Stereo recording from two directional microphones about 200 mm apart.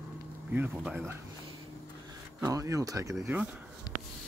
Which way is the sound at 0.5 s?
10° right (ahead or behind).